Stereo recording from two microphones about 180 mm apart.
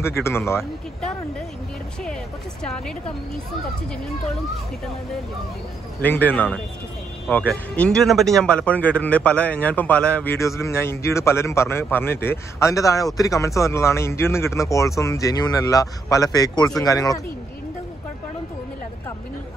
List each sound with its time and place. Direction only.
5.9 s speech: 10° left (ahead or behind)